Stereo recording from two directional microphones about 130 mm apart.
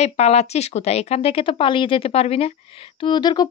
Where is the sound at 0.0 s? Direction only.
55° left (ahead or behind).